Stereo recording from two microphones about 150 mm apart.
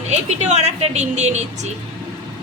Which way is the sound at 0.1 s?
50° right (ahead or behind).